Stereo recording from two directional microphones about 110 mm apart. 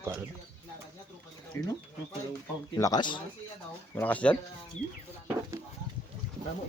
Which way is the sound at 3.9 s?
15° left (ahead or behind).